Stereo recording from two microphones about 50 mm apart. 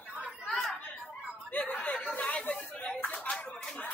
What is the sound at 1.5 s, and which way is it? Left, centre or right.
Chuckle, left.